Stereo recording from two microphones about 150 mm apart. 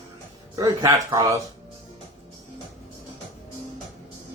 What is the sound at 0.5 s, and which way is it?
Speech, 25° right (ahead or behind).